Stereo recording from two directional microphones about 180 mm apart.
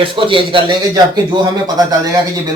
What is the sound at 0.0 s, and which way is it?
Speech, 30° right (ahead or behind).